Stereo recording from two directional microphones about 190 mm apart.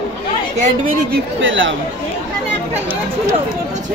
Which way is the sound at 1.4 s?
80° right.